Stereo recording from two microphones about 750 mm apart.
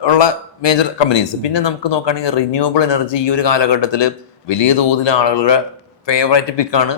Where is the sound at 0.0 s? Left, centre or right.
Left.